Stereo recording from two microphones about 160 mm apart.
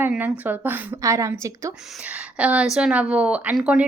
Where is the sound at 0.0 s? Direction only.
10° right (ahead or behind).